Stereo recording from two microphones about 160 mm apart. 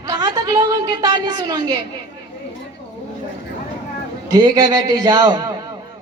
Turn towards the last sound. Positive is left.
turn(degrees=-25)  # may be behind; listen again after turning